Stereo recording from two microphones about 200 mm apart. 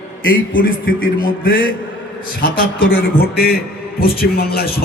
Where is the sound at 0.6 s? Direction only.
45° left (ahead or behind).